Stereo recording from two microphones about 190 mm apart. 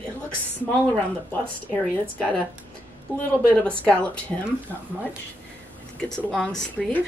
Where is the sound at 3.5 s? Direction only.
5° left (ahead or behind).